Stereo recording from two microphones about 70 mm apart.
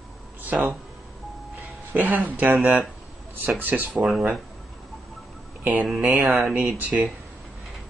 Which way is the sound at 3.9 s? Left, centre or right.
Centre.